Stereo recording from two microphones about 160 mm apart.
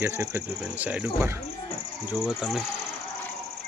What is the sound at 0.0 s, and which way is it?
Speech, 15° right (ahead or behind).